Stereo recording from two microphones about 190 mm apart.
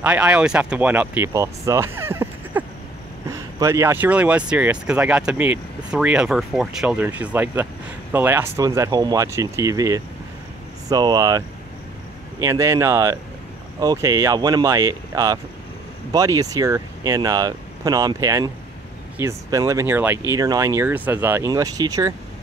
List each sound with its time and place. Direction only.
0.0 s speech: 5° right (ahead or behind)